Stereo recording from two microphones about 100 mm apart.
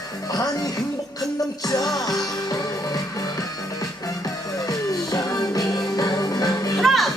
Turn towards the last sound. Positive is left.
turn(degrees=0)  # may be behind; listen again after turning